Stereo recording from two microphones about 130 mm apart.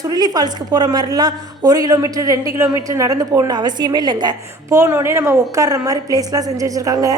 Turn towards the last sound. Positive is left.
turn(degrees=-25)  # may be behind; listen again after turning